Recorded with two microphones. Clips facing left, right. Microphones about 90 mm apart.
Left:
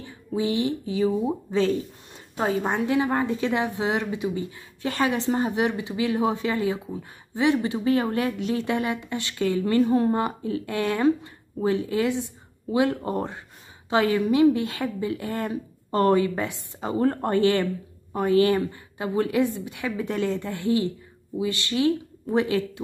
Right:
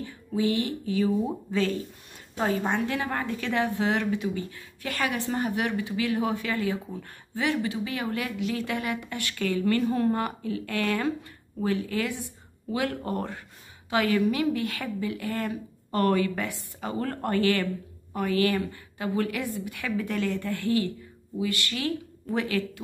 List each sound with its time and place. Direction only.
0.0 s a woman's voice: 20° left (ahead or behind)